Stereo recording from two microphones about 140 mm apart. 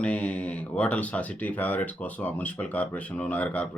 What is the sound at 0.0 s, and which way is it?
Speech, 10° left (ahead or behind).